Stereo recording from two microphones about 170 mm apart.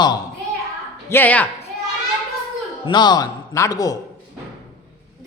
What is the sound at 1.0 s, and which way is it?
Speech, 10° left (ahead or behind).